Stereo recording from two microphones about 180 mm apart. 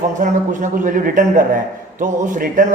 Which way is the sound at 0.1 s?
45° right (ahead or behind).